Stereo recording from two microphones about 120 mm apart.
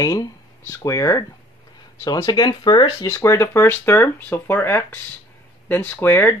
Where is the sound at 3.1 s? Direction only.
25° left (ahead or behind).